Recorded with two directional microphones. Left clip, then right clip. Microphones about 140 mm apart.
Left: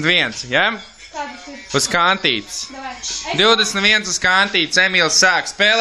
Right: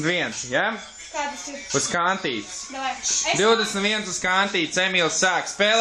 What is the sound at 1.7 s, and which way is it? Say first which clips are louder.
Speech: left 7 dB; 15° left (ahead or behind).